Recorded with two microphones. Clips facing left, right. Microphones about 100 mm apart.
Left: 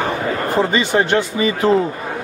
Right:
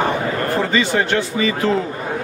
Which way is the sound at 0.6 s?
20° left (ahead or behind).